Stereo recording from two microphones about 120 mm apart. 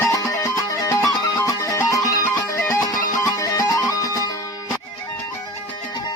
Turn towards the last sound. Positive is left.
turn(degrees=30)  # may be behind; listen again after turning